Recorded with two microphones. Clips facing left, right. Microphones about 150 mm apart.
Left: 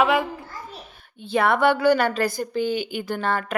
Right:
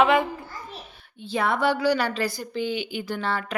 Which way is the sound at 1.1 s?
55° left (ahead or behind).